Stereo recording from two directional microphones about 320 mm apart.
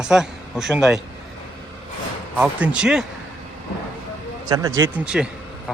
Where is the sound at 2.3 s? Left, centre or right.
Centre.